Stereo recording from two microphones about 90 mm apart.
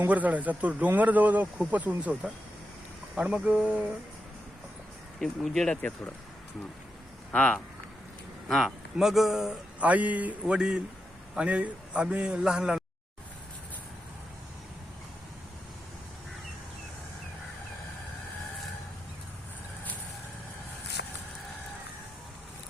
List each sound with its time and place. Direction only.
0.1 s speech: 15° right (ahead or behind)
5.2 s speech: 5° left (ahead or behind)
7.3 s speech: 10° left (ahead or behind)
8.4 s speech: centre (ahead or behind)
9.8 s speech: 15° right (ahead or behind)